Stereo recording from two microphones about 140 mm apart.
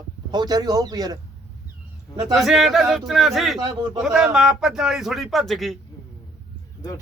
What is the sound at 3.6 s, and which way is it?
Speech, 30° right (ahead or behind).